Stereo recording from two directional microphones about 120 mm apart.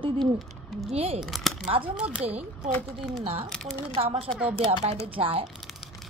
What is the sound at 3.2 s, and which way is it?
Speech, 50° right (ahead or behind).